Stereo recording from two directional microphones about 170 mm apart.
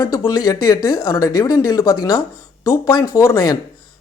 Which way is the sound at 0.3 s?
20° left (ahead or behind).